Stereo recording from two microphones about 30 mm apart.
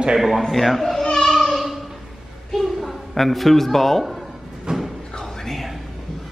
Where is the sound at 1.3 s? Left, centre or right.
Centre.